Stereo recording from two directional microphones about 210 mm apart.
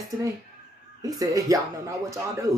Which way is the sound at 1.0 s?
15° right (ahead or behind).